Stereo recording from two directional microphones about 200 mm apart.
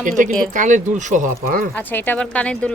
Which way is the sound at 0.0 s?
40° right (ahead or behind).